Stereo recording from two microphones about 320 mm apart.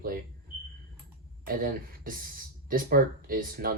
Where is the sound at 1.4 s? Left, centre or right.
Right.